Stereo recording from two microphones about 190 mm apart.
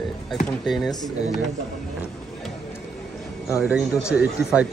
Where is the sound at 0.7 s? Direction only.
Centre (ahead or behind).